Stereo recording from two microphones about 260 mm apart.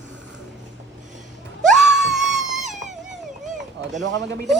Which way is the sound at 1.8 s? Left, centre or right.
Centre.